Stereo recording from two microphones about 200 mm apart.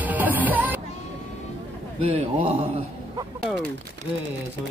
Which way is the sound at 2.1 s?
30° right (ahead or behind).